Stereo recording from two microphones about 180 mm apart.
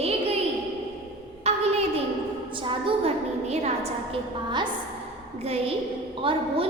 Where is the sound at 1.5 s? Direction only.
35° right (ahead or behind).